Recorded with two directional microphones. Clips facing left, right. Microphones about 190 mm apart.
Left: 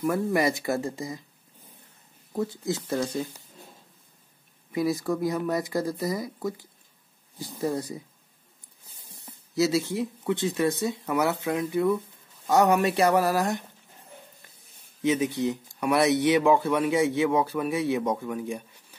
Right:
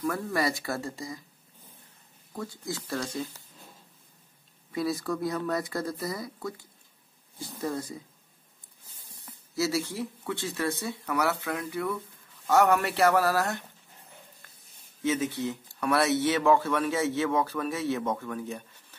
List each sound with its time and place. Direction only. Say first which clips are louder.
0.0 s speech: left 5 dB; 20° left (ahead or behind)
2.7 s speech: left 4 dB; 20° left (ahead or behind)
4.7 s speech: left 4 dB; 15° left (ahead or behind)
7.6 s speech: left 4 dB; 20° left (ahead or behind)
9.2 s speech: left 5 dB; 20° left (ahead or behind)
15.0 s speech: left 4 dB; 15° left (ahead or behind)